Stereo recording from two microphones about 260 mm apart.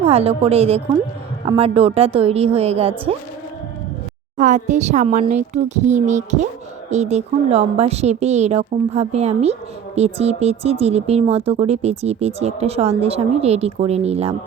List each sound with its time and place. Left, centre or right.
0.0 s a woman's voice: right
4.4 s a woman's voice: right